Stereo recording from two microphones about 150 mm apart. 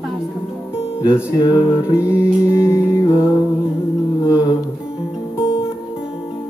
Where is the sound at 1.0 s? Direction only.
20° left (ahead or behind).